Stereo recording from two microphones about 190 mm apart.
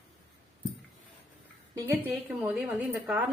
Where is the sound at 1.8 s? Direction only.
10° right (ahead or behind).